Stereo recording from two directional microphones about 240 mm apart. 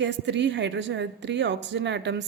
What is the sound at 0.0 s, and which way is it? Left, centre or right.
A woman's voice, right.